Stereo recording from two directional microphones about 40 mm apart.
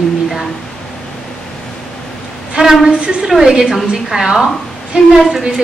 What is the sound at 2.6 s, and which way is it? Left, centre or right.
Speech, centre.